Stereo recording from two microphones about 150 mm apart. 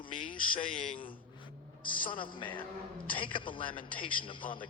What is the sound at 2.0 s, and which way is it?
A man's voice, 35° left (ahead or behind).